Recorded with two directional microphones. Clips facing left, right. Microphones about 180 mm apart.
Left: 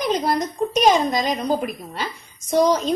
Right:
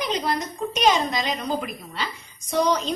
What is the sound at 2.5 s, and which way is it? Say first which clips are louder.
Speech: left 5 dB; 45° left (ahead or behind).